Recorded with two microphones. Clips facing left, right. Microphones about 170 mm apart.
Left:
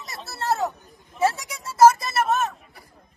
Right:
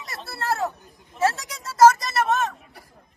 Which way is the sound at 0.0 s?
Centre (ahead or behind).